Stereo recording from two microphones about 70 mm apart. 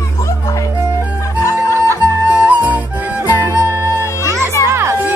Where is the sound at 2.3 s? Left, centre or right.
Right.